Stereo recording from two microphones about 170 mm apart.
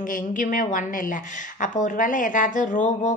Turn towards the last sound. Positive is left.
turn(degrees=50)  # may be behind; listen again after turning